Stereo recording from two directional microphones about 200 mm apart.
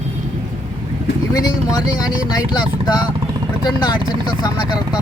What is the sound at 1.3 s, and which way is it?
Speech, 20° left (ahead or behind).